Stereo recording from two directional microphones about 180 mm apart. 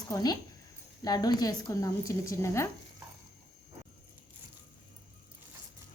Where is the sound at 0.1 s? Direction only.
20° left (ahead or behind).